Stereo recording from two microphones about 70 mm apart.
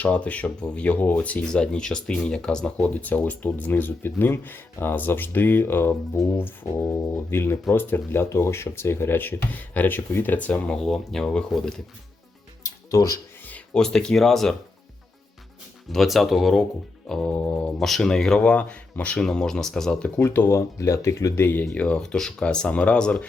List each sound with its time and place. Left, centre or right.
0.0 s speech: centre
12.6 s music: left
13.7 s speech: centre
15.9 s speech: centre
17.3 s speech: left
17.7 s speech: centre
20.1 s speech: left
20.6 s speech: left
21.4 s speech: left
21.8 s speech: centre